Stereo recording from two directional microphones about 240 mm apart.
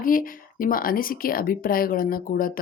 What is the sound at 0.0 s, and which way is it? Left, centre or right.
Speech, left.